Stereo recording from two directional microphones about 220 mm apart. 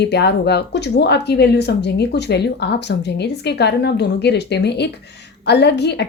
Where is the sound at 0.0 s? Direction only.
50° left (ahead or behind).